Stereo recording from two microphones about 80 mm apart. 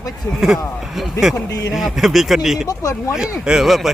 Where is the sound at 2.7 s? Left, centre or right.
Left.